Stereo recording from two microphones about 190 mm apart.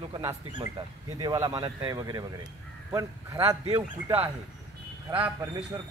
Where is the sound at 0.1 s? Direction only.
25° right (ahead or behind).